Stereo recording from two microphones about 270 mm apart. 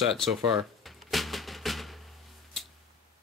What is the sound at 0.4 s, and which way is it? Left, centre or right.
Speech, centre.